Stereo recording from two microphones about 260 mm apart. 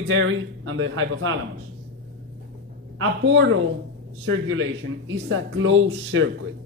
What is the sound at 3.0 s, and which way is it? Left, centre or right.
Speech, right.